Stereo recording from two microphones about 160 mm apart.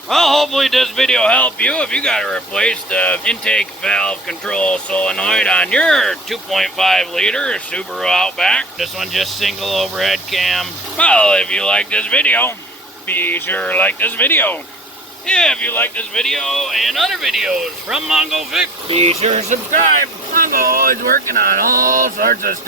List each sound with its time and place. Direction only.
0.1 s speech: centre (ahead or behind)
18.9 s speech: 40° right (ahead or behind)
20.3 s speech: 60° right (ahead or behind)